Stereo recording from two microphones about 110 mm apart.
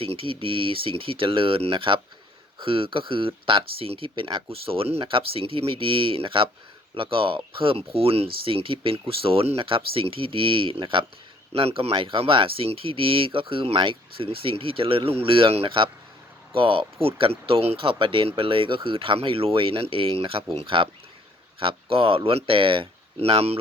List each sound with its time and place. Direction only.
0.0 s speech: 60° right (ahead or behind)
23.2 s speech: 65° right (ahead or behind)